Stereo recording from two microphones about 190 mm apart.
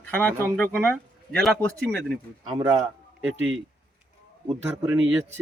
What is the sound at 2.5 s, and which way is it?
Speech, 20° right (ahead or behind).